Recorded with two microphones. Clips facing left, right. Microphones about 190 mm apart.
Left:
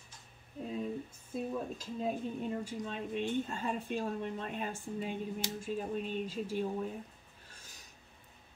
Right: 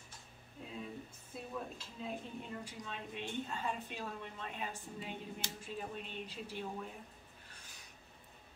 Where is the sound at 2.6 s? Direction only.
45° left (ahead or behind).